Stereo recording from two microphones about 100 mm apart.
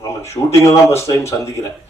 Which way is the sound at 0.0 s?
25° left (ahead or behind).